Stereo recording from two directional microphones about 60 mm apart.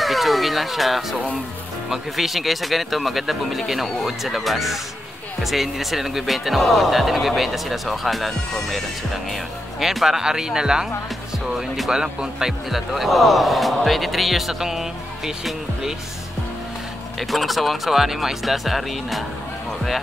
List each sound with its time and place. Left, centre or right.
0.0 s speech: centre
17.2 s speech: centre